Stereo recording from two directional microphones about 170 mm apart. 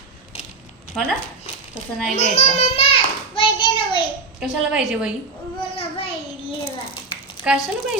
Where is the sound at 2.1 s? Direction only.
40° left (ahead or behind).